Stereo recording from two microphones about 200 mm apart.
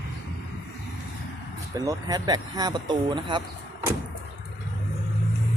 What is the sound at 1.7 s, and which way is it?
Speech, 20° right (ahead or behind).